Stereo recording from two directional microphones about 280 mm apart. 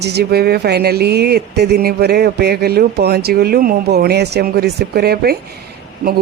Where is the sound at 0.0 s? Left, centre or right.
Right.